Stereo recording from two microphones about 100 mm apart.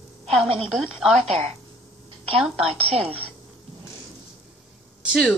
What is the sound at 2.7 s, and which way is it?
Speech, 90° right.